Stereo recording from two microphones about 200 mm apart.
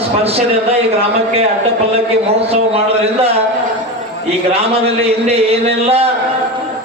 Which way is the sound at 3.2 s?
30° right (ahead or behind).